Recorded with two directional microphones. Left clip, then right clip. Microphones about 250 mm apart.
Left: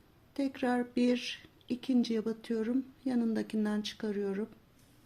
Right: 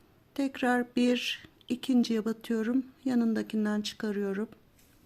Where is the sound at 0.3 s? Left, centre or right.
Centre.